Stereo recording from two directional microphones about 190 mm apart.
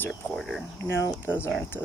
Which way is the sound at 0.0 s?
Centre (ahead or behind).